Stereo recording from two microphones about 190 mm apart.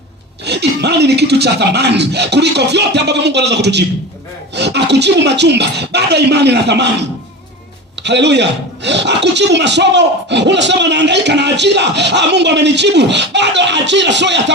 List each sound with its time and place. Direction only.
0.4 s speech: 60° right (ahead or behind)
8.0 s speech: 65° right (ahead or behind)